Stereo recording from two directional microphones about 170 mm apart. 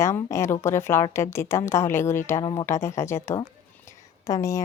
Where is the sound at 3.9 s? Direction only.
20° left (ahead or behind).